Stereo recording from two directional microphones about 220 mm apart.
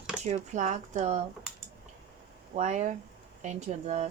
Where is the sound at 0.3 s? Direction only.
35° right (ahead or behind).